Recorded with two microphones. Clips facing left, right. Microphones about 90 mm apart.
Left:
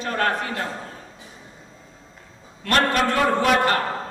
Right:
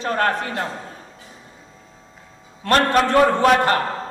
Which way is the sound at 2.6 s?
35° right (ahead or behind).